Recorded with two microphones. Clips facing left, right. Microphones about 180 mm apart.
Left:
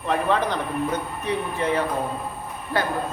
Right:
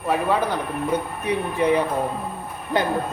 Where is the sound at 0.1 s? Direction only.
10° right (ahead or behind).